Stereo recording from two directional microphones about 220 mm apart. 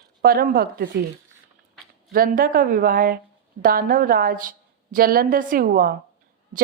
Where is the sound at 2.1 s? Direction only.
40° right (ahead or behind).